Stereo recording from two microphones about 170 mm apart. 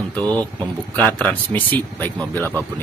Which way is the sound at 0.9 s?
10° left (ahead or behind).